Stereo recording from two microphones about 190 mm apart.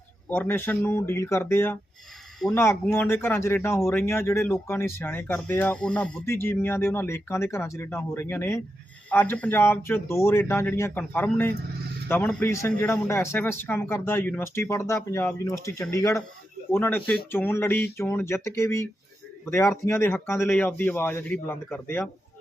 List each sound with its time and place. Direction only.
0.3 s a man's voice: 10° left (ahead or behind)